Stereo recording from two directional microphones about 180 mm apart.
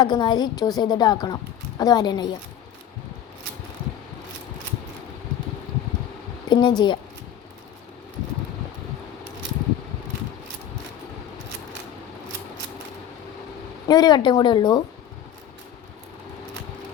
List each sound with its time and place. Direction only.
0.0 s a woman's voice: 25° left (ahead or behind)
6.5 s a woman's voice: 25° left (ahead or behind)
13.8 s a woman's voice: 20° left (ahead or behind)